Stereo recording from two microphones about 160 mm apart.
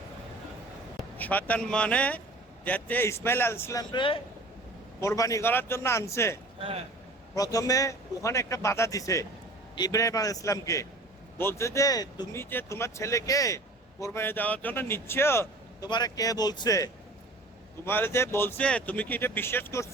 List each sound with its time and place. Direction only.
1.2 s speech: 10° left (ahead or behind)
3.9 s speech: 30° left (ahead or behind)
4.9 s speech: 20° left (ahead or behind)
6.6 s speech: 35° right (ahead or behind)
7.3 s speech: 20° left (ahead or behind)
12.4 s speech: 15° left (ahead or behind)